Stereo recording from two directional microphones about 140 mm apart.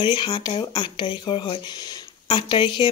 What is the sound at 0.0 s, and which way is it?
Speech, 35° left (ahead or behind).